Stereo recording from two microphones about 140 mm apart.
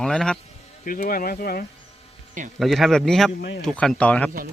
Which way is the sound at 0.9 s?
85° left.